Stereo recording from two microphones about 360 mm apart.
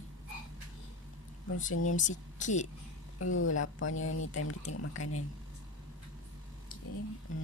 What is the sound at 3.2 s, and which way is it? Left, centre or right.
Speech, left.